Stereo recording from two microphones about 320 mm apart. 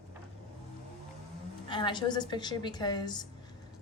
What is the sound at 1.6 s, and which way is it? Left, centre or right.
A woman's voice, centre.